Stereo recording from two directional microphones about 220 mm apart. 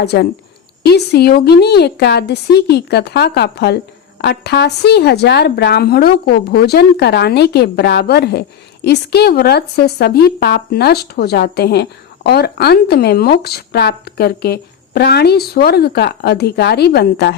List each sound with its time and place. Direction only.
0.0 s a woman's voice: 50° left (ahead or behind)